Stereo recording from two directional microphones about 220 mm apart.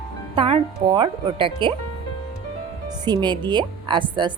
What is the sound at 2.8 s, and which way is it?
Speech, 20° right (ahead or behind).